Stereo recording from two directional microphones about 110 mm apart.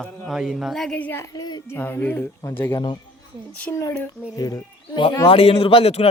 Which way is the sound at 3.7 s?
30° left (ahead or behind).